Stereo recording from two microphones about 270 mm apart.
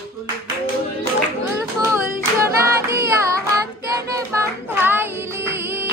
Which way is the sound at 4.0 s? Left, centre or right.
Centre.